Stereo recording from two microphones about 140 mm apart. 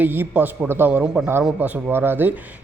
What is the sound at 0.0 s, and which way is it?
A man's voice, 15° right (ahead or behind).